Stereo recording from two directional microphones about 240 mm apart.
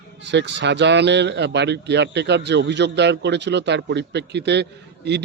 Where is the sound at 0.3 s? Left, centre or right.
Right.